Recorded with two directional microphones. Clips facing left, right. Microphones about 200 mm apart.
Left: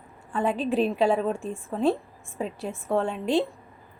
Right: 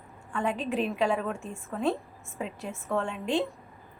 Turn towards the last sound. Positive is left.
turn(degrees=35)  # may be behind; listen again after turning